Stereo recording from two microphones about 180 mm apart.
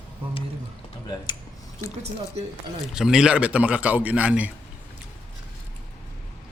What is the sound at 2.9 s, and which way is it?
A man's voice, 5° right (ahead or behind).